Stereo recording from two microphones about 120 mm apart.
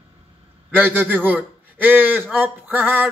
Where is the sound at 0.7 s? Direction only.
15° right (ahead or behind).